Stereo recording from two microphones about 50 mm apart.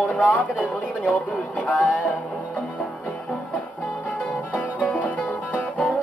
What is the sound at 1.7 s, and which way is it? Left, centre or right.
Music, left.